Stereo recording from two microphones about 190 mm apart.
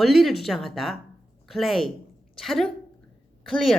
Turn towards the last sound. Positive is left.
turn(degrees=0)  # may be behind; listen again after turning